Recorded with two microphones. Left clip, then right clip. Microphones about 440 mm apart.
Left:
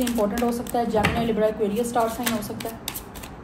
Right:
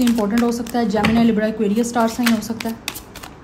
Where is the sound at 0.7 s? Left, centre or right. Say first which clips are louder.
Right 3 dB; right.